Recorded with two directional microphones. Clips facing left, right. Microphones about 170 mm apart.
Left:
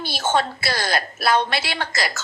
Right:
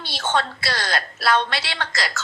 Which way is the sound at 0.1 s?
10° left (ahead or behind).